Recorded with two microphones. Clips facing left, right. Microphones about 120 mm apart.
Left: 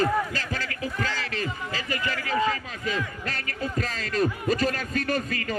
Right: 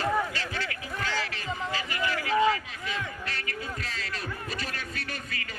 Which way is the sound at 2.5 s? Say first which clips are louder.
Left 3 dB; 40° left (ahead or behind).